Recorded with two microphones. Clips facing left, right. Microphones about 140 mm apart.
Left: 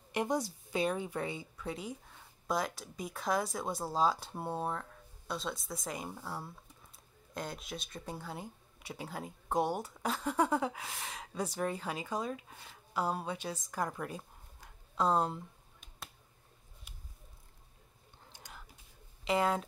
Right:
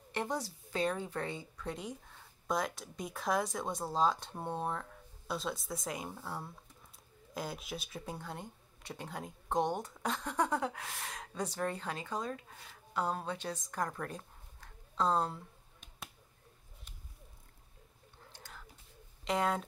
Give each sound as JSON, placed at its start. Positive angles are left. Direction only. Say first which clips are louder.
{"t": 0.1, "sound": "speech", "louder": "left 4 dB", "side_deg": 15}
{"t": 18.3, "sound": "whispering", "louder": "left 1 dB", "side_deg": 15}
{"t": 19.2, "sound": "speech", "louder": "left 2 dB", "side_deg": 5}